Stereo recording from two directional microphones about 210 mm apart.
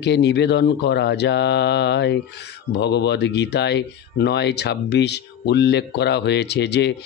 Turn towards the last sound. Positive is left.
turn(degrees=55)  # may be behind; listen again after turning